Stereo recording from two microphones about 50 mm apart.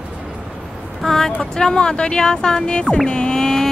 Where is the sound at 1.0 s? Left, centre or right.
Centre.